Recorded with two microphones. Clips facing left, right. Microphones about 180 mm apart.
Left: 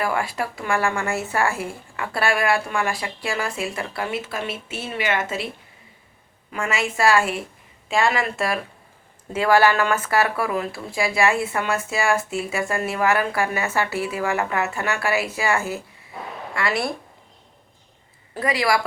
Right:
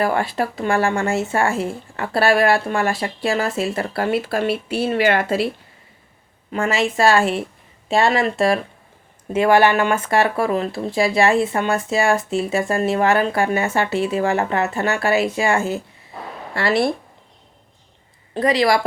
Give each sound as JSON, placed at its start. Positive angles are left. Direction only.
{"t": 0.0, "sound": "speech", "side_deg": -30}
{"t": 2.9, "sound": "speech", "side_deg": -25}
{"t": 3.9, "sound": "speech", "side_deg": -45}
{"t": 4.9, "sound": "speech", "side_deg": -30}
{"t": 6.5, "sound": "speech", "side_deg": -30}
{"t": 18.3, "sound": "speech", "side_deg": -25}